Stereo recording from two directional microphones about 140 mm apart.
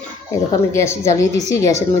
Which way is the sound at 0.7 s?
20° left (ahead or behind).